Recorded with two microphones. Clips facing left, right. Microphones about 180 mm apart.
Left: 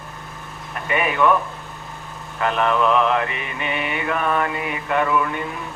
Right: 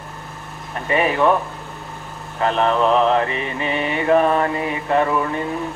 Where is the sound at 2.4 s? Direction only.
30° right (ahead or behind).